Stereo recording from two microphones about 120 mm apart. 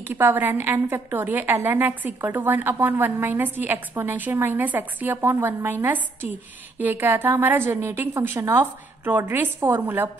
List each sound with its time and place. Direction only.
0.1 s a woman's voice: 15° right (ahead or behind)